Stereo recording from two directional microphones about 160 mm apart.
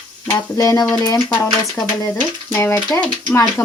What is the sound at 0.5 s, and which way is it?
Speech, 20° left (ahead or behind).